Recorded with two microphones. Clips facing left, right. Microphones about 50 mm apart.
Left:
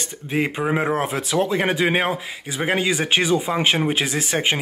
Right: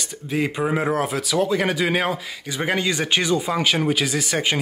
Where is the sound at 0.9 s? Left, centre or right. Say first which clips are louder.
Even; left.